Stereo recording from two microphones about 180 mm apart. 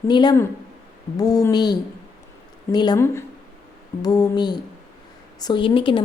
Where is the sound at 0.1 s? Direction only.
25° left (ahead or behind).